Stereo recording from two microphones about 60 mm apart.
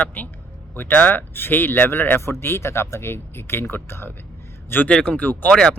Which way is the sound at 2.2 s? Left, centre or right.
Left.